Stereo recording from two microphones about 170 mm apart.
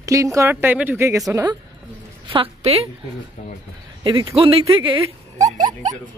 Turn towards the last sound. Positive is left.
turn(degrees=-45)  # may be behind; listen again after turning